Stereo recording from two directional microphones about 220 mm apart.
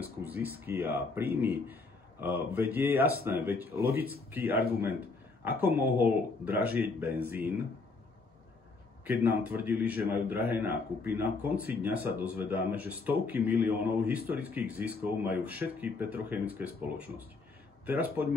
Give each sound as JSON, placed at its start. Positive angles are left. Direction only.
{"t": 0.0, "sound": "speech", "side_deg": -10}
{"t": 9.0, "sound": "speech", "side_deg": -10}